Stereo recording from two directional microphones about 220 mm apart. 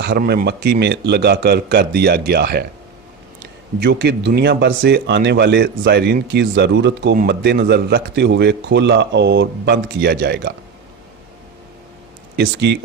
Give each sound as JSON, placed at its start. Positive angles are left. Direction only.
{"t": 0.0, "sound": "speech", "side_deg": -50}
{"t": 12.4, "sound": "speech", "side_deg": -50}